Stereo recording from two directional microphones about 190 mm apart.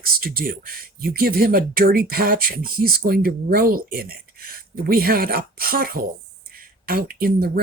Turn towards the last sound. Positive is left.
turn(degrees=-55)  # may be behind; listen again after turning